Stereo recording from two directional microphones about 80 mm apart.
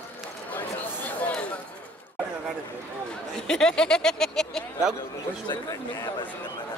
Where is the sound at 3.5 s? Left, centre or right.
Centre.